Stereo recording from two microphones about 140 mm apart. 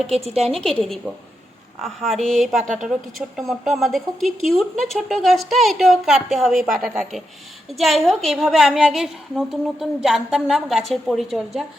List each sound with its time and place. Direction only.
0.1 s a woman's voice: 45° right (ahead or behind)
0.5 s a woman's voice: centre (ahead or behind)